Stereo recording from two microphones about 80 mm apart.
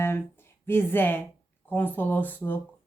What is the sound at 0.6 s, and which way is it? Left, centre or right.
Speech, left.